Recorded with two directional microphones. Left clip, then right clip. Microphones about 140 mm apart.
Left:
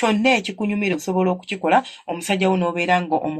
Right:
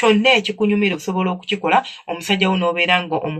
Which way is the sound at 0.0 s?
65° left (ahead or behind).